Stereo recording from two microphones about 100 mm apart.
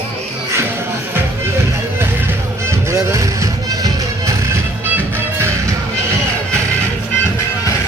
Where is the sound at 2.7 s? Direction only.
30° right (ahead or behind).